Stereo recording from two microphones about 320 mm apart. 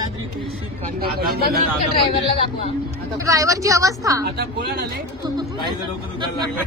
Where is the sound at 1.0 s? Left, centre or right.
Right.